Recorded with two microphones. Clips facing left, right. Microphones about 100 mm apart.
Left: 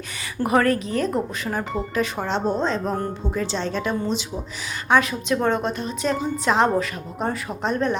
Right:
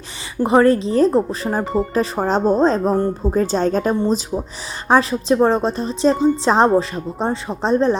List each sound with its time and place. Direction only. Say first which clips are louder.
0.4 s speech: right 6 dB; 30° right (ahead or behind)